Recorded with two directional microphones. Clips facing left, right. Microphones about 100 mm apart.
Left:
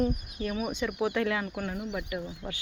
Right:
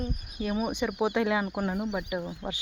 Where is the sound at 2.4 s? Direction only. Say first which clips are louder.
Right 3 dB; 40° right (ahead or behind).